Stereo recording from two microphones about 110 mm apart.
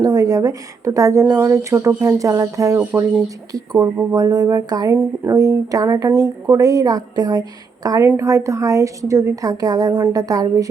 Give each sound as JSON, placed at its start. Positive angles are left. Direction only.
{"t": 0.0, "sound": "speech", "side_deg": -35}
{"t": 8.0, "sound": "speech", "side_deg": -25}